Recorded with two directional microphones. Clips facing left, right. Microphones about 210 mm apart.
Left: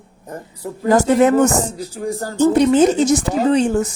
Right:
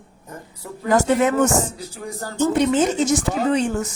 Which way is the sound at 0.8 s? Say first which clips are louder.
Left 4 dB; 35° left (ahead or behind).